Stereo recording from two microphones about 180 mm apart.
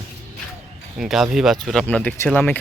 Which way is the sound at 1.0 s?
Centre (ahead or behind).